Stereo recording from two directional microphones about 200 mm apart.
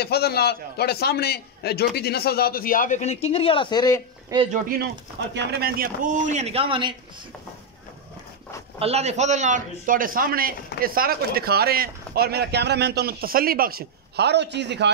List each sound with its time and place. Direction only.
0.0 s a man's voice: 50° left (ahead or behind); by 4.0 s 20° left (ahead or behind)
4.5 s a man's voice: 45° right (ahead or behind); by 6.9 s 25° right (ahead or behind)
8.7 s a man's voice: 30° right (ahead or behind); by 14.9 s 60° right (ahead or behind)